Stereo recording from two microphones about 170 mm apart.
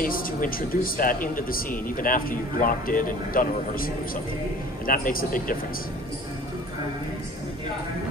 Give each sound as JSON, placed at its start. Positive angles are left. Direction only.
{"t": 0.0, "sound": "speech", "side_deg": 55}